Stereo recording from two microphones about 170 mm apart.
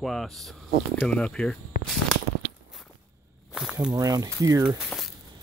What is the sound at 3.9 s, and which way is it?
Speech, 20° right (ahead or behind).